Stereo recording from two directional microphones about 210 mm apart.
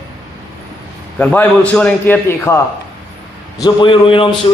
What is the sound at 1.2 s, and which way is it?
A man's voice, 5° left (ahead or behind).